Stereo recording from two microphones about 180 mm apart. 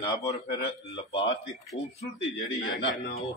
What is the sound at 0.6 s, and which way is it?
Speech, 65° left (ahead or behind).